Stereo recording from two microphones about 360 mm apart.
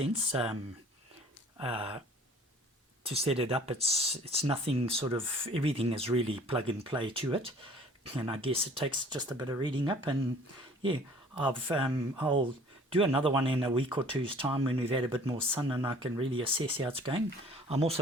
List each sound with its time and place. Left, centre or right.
0.0 s speech: centre
3.0 s speech: centre
11.3 s speech: centre